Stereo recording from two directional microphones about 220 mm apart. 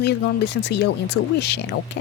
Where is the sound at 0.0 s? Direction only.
50° left (ahead or behind).